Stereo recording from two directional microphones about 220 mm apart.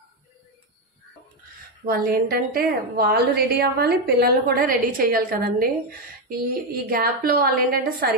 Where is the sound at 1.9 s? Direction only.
40° right (ahead or behind).